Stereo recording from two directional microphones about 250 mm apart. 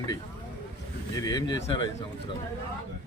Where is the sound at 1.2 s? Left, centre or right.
Centre.